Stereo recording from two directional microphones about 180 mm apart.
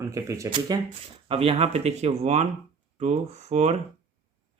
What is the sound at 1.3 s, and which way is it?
Speech, 35° right (ahead or behind).